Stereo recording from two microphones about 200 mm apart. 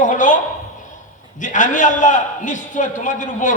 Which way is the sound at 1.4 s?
40° left (ahead or behind).